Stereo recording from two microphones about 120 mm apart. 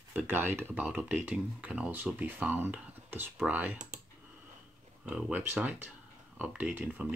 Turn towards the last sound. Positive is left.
turn(degrees=-10)  # may be behind; listen again after turning